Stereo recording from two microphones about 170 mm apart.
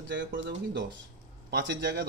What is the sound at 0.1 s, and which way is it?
Speech, 90° right.